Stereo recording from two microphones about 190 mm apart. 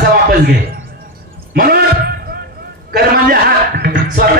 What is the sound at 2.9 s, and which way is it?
A man's voice, 55° right (ahead or behind).